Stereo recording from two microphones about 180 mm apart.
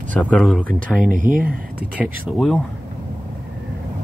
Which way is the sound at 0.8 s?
50° right (ahead or behind).